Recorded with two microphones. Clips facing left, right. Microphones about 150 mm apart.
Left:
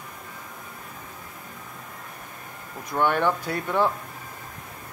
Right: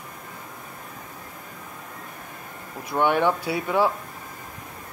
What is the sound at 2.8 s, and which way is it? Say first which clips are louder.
Speech: right 2 dB; 15° right (ahead or behind).